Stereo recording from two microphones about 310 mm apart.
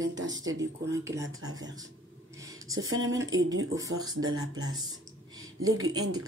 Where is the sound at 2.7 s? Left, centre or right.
Right.